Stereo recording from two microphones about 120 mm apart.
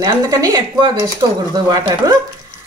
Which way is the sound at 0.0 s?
30° right (ahead or behind).